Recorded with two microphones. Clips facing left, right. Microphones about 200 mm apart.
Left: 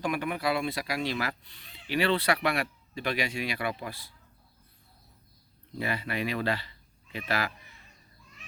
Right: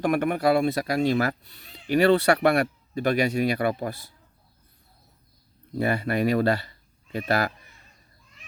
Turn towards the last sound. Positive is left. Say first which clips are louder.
# right 7 dB
turn(degrees=-40)  # may be behind; listen again after turning